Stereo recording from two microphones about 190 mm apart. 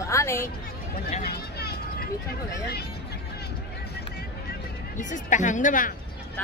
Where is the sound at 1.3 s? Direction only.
55° left (ahead or behind).